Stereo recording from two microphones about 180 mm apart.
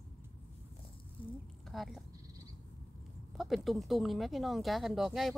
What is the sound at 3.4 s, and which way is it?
Speech, centre (ahead or behind).